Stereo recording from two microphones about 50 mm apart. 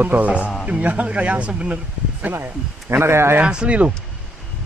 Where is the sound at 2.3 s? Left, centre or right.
Right.